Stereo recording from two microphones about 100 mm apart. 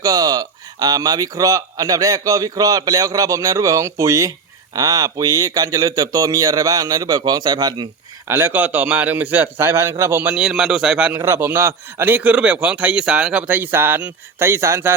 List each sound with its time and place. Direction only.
0.0 s speech: 40° right (ahead or behind)
8.3 s a man's voice: 20° right (ahead or behind)
10.2 s a man's voice: 10° right (ahead or behind)
11.2 s a man's voice: 25° right (ahead or behind)
13.6 s speech: 20° right (ahead or behind)